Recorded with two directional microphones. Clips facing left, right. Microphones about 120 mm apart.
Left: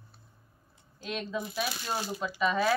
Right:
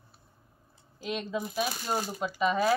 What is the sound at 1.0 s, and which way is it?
Speech, 10° right (ahead or behind).